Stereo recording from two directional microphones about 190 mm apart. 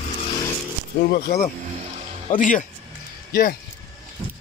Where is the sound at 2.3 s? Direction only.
45° left (ahead or behind).